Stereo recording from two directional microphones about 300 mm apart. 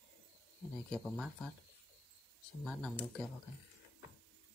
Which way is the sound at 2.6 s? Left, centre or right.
Centre.